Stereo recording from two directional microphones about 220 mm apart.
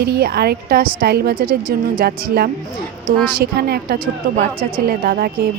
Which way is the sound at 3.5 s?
45° right (ahead or behind).